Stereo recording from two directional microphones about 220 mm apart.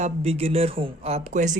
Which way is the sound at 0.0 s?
30° right (ahead or behind).